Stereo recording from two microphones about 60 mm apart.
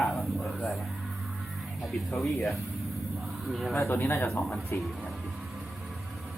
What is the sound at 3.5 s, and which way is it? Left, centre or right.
Speech, centre.